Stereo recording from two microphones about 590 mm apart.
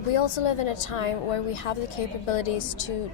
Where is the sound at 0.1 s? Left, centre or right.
Left.